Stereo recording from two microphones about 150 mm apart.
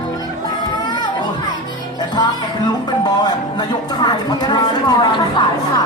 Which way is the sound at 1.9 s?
25° left (ahead or behind).